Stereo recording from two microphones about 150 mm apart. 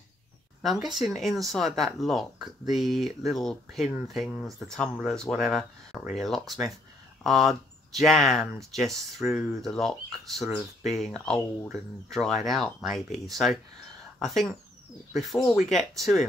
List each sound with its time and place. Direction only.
0.7 s speech: 30° right (ahead or behind)
1.0 s speech: centre (ahead or behind)